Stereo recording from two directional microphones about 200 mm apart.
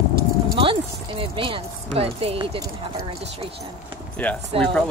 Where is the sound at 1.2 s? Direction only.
25° right (ahead or behind).